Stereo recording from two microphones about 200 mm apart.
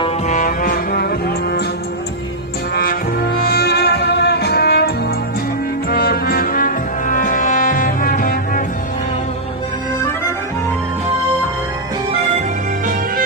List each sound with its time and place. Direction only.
0.3 s music: 45° left (ahead or behind)
2.7 s music: 50° left (ahead or behind)